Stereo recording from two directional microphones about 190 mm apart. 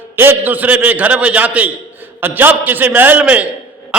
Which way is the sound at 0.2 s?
10° right (ahead or behind).